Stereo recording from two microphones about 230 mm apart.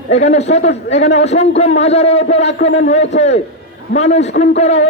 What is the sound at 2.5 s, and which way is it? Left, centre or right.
Speech, left.